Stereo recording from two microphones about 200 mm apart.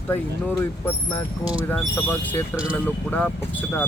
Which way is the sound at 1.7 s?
5° left (ahead or behind).